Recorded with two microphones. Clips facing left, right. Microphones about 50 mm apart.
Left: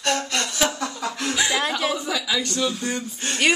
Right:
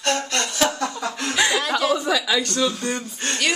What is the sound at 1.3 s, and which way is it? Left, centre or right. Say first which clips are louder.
Chuckle: right 3 dB; right.